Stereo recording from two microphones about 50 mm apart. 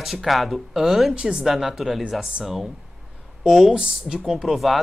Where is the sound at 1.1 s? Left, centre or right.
Centre.